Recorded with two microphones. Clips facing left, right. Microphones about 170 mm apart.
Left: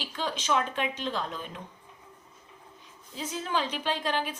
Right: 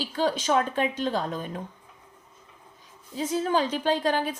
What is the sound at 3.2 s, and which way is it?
A woman's voice, 40° right (ahead or behind).